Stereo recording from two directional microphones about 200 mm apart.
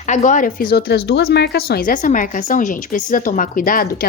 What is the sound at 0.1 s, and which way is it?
A woman's voice, 40° left (ahead or behind).